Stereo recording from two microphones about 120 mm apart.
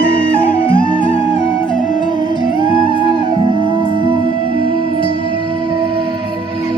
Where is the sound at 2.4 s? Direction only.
45° right (ahead or behind).